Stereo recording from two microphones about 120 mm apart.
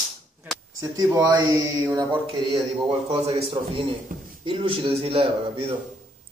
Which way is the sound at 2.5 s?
55° right (ahead or behind).